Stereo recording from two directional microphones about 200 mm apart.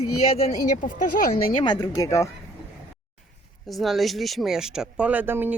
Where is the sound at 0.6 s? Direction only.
45° left (ahead or behind).